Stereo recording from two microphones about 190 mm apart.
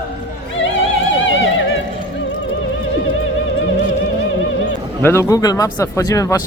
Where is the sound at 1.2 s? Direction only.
85° left.